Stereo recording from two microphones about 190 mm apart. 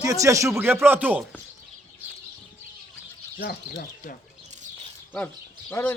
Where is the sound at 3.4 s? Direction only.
50° left (ahead or behind).